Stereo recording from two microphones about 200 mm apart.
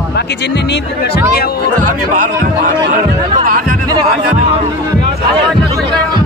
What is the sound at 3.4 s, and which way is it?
Speech, 45° right (ahead or behind).